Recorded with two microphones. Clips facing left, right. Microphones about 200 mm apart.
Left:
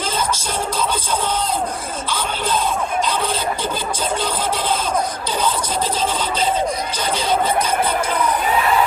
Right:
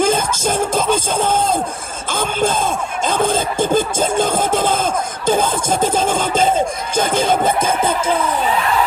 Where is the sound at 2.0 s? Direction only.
50° right (ahead or behind).